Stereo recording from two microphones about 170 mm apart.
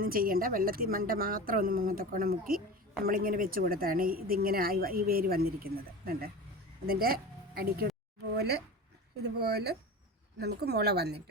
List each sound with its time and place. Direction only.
0.0 s a woman's voice: 55° right (ahead or behind)
8.4 s speech: 75° right (ahead or behind)